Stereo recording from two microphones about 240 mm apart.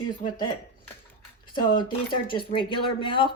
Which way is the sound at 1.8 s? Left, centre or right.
Centre.